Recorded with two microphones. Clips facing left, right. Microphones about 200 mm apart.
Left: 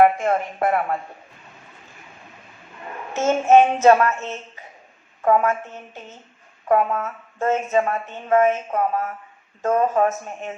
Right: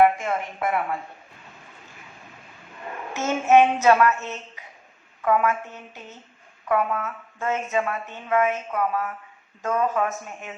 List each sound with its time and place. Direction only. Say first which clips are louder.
0.0 s speech: left 3 dB; 50° left (ahead or behind)
3.2 s child singing: left 3 dB; 40° left (ahead or behind)
5.2 s speech: left 3 dB; 40° left (ahead or behind)
6.7 s speech: left 4 dB; 40° left (ahead or behind)